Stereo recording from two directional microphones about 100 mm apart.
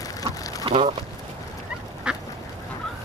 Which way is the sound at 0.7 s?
75° right (ahead or behind).